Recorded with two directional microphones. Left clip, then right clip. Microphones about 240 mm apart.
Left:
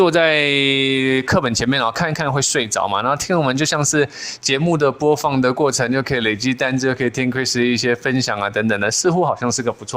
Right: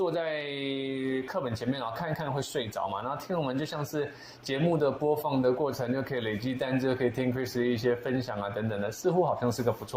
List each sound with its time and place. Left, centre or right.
0.0 s speech: left